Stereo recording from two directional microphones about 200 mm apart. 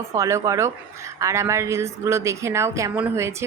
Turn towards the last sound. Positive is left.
turn(degrees=-15)  # may be behind; listen again after turning